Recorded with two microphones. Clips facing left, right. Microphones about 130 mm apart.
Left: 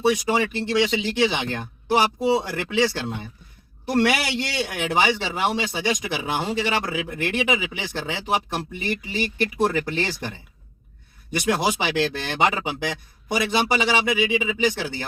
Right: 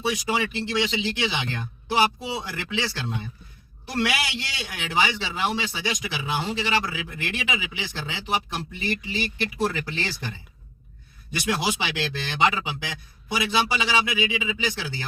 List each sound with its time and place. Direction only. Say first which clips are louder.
0.0 s speech: left 5 dB; 50° left (ahead or behind)
11.3 s speech: left 4 dB; 50° left (ahead or behind)